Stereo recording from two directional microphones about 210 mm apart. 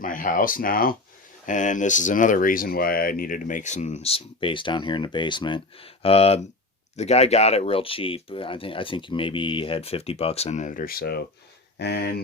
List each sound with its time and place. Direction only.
0.0 s speech: 40° left (ahead or behind)